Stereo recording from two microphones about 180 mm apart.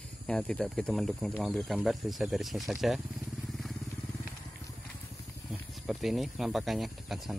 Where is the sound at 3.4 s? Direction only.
Centre (ahead or behind).